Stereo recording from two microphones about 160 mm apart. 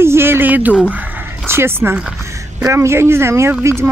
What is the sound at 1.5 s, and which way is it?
A woman's voice, 15° right (ahead or behind).